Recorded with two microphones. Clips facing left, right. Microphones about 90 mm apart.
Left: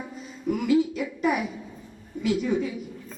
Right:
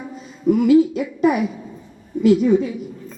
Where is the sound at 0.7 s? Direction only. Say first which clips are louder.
Right 5 dB; 55° right (ahead or behind).